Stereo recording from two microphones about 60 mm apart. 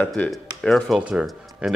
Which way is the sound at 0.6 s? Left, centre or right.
Centre.